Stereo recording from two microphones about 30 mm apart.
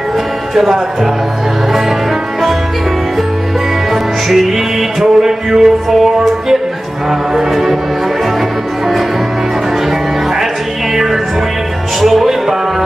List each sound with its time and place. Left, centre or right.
3.9 s music: centre
5.0 s music: centre